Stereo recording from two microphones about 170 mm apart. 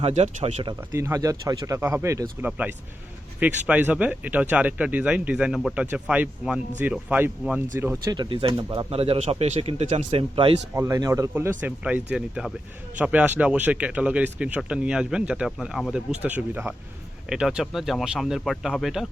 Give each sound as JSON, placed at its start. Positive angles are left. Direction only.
{"t": 0.0, "sound": "speech", "side_deg": -40}
{"t": 0.6, "sound": "speech", "side_deg": -20}
{"t": 8.1, "sound": "speech", "side_deg": -30}
{"t": 10.8, "sound": "speech", "side_deg": -20}